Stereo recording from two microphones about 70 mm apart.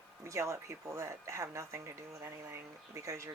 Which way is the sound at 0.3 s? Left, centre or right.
Right.